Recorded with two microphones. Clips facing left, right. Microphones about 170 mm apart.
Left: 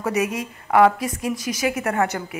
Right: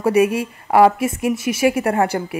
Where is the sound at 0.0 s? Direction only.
30° right (ahead or behind).